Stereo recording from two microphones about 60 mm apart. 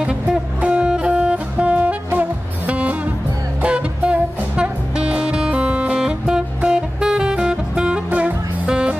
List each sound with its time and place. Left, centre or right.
0.0 s music: centre
8.1 s music: right
8.6 s music: centre